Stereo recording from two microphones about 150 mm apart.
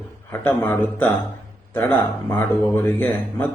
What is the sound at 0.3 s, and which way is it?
Speech, 15° left (ahead or behind).